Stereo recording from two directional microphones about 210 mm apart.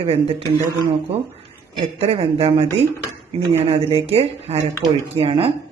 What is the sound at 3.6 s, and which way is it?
Speech, 30° right (ahead or behind).